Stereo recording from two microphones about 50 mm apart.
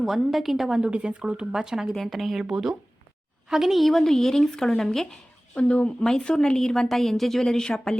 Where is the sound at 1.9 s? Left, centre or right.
Centre.